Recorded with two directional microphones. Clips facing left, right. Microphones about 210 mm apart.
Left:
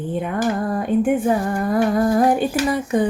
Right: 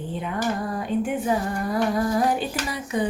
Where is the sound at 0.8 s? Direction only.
50° left (ahead or behind).